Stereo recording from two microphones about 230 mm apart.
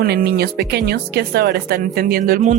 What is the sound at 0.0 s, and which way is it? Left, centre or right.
Speech, right.